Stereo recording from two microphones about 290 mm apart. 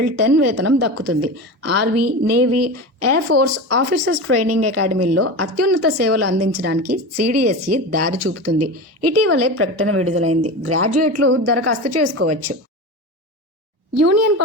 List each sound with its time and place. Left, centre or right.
0.0 s a woman's voice: right
14.0 s speech: right